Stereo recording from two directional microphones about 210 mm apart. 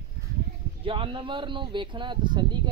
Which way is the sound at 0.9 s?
25° right (ahead or behind).